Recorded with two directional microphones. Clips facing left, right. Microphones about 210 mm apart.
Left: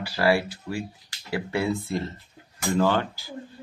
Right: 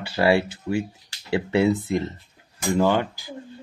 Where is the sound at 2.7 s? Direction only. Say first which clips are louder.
Right 2 dB; 15° right (ahead or behind).